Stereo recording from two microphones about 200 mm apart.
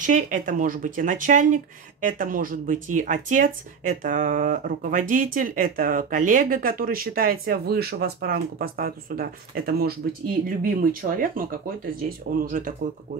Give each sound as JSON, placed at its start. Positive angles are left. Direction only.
{"t": 0.0, "sound": "speech", "side_deg": -40}